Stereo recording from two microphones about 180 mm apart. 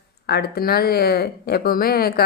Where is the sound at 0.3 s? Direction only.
65° left (ahead or behind).